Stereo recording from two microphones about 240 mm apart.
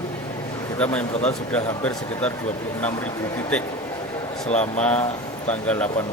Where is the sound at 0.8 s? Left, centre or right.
Centre.